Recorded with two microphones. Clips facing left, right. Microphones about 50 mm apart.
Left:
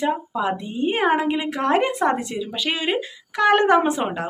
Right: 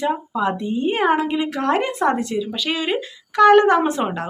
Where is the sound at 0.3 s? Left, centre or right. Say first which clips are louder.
Right 2 dB; centre.